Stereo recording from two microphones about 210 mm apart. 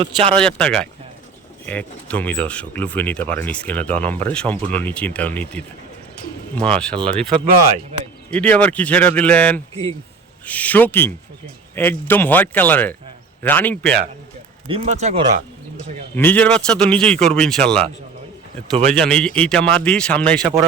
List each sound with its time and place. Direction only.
0.0 s speech: 30° right (ahead or behind)
0.4 s a man's voice: 5° left (ahead or behind)
8.3 s speech: 5° left (ahead or behind)
14.7 s speech: 30° right (ahead or behind)
16.1 s a man's voice: 10° left (ahead or behind)
18.9 s a man's voice: 5° left (ahead or behind)